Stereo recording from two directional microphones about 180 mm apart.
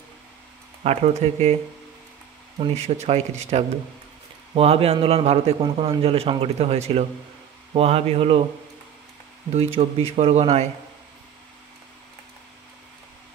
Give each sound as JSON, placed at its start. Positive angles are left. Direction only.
{"t": 0.8, "sound": "a man's voice", "side_deg": -40}
{"t": 2.6, "sound": "a man's voice", "side_deg": -35}
{"t": 9.5, "sound": "a man's voice", "side_deg": -35}